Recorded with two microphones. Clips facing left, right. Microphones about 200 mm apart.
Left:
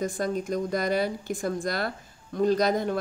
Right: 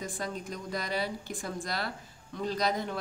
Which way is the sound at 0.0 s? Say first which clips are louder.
Left 9 dB; 45° left (ahead or behind).